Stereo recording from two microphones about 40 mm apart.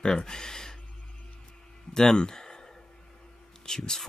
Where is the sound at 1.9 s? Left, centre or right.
Centre.